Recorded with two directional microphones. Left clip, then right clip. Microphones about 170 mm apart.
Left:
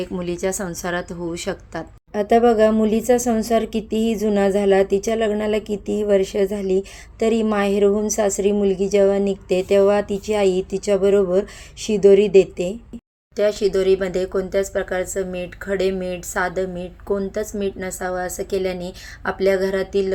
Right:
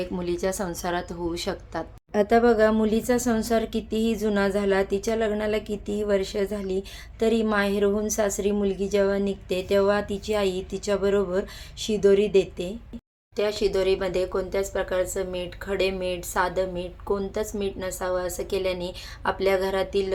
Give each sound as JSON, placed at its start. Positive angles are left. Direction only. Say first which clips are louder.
{"t": 0.0, "sound": "a woman's voice", "louder": "left 3 dB", "side_deg": 15}
{"t": 9.0, "sound": "speech", "louder": "left 7 dB", "side_deg": -45}
{"t": 9.2, "sound": "speech", "louder": "left 7 dB", "side_deg": 5}